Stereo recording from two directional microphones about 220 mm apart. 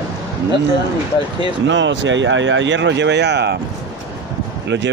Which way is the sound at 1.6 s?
55° right (ahead or behind).